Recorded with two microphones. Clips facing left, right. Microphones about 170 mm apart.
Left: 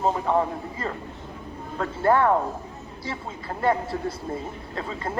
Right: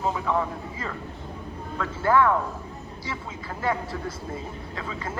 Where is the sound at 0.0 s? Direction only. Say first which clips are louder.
Left 3 dB; 35° left (ahead or behind).